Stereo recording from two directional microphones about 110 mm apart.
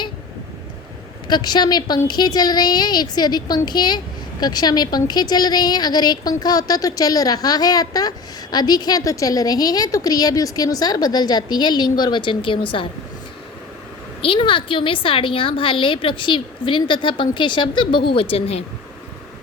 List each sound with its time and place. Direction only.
1.3 s a woman's voice: 40° left (ahead or behind)
14.2 s a woman's voice: 55° left (ahead or behind)